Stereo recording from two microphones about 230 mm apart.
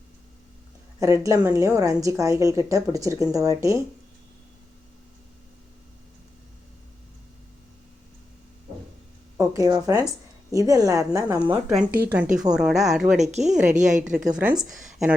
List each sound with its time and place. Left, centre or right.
0.9 s a woman's voice: centre
9.4 s a woman's voice: centre
13.1 s a woman's voice: right
14.3 s a woman's voice: centre